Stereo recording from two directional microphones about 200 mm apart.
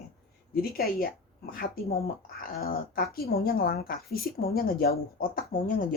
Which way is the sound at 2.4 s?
50° left (ahead or behind).